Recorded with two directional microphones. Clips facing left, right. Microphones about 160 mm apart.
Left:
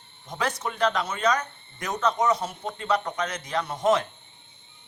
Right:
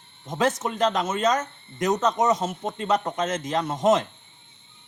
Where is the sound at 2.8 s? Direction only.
45° right (ahead or behind).